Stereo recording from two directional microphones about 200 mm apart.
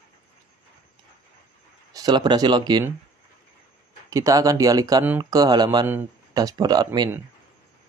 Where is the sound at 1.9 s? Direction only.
20° right (ahead or behind).